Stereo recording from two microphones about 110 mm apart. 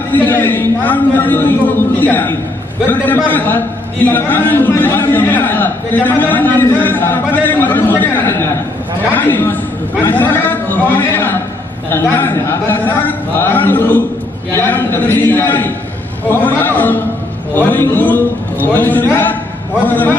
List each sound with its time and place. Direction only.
0.1 s a man's voice: 20° left (ahead or behind)